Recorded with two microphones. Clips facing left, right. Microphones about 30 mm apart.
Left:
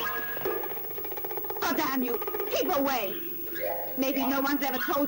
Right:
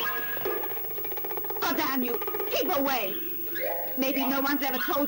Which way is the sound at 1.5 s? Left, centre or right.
Centre.